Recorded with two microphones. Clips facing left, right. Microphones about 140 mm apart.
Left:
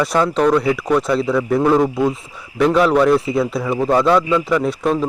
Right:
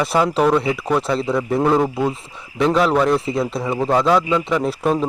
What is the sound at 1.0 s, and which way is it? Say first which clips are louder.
A man's voice: left 3 dB; centre (ahead or behind).